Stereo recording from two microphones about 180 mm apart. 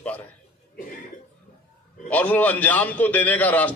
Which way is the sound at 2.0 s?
10° left (ahead or behind).